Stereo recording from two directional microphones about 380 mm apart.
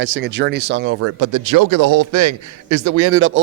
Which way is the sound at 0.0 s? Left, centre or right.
Right.